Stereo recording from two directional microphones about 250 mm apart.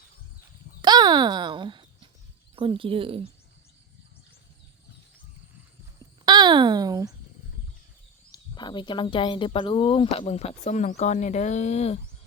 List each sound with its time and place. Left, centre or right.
0.8 s a sound: centre
2.6 s speech: right
6.2 s speech: centre
8.3 s speech: centre